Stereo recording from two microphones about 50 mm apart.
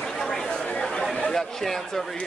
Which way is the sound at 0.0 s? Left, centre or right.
Centre.